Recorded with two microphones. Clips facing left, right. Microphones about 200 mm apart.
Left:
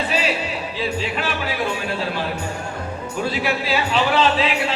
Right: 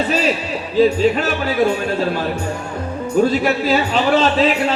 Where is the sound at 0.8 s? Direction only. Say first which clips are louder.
Right 13 dB; 40° right (ahead or behind).